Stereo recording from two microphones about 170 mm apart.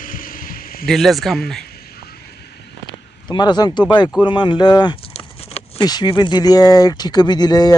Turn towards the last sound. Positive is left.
turn(degrees=25)  # may be behind; listen again after turning